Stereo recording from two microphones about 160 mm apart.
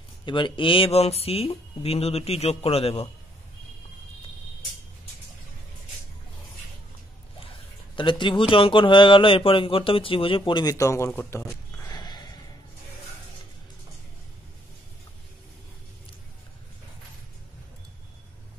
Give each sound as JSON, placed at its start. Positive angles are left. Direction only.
{"t": 0.2, "sound": "speech", "side_deg": 30}
{"t": 7.9, "sound": "speech", "side_deg": 30}
{"t": 11.1, "sound": "a sound", "side_deg": 15}